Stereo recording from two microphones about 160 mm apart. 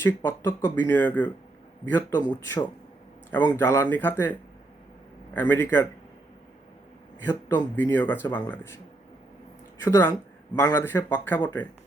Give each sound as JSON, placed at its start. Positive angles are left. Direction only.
{"t": 0.0, "sound": "speech", "side_deg": 15}
{"t": 3.3, "sound": "speech", "side_deg": 15}
{"t": 7.2, "sound": "speech", "side_deg": 10}